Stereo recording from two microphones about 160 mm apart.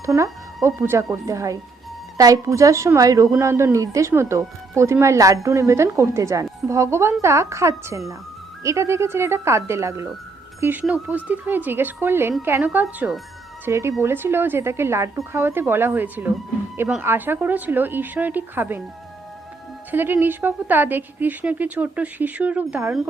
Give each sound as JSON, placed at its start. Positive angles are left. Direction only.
{"t": 0.2, "sound": "a woman's voice", "side_deg": -15}
{"t": 19.9, "sound": "speech", "side_deg": -10}